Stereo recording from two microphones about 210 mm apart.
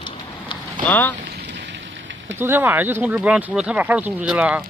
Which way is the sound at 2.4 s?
10° right (ahead or behind).